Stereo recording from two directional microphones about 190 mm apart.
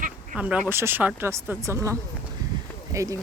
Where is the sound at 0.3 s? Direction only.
5° right (ahead or behind).